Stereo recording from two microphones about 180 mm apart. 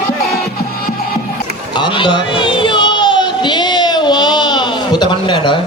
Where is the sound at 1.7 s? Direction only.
25° left (ahead or behind).